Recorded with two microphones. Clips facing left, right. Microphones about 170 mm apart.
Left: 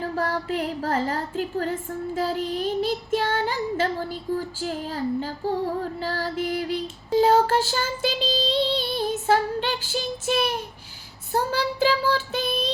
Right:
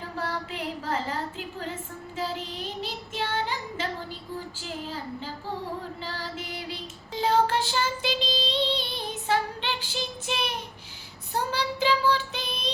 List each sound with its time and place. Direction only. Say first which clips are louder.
0.2 s female singing: left 5 dB; 45° left (ahead or behind)
8.7 s child singing: left 7 dB; 40° left (ahead or behind)
11.3 s female singing: left 4 dB; 45° left (ahead or behind)